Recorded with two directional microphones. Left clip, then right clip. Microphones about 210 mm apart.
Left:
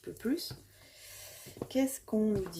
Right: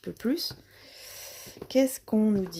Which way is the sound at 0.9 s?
45° right (ahead or behind).